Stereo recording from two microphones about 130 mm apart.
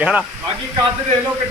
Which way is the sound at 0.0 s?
5° right (ahead or behind).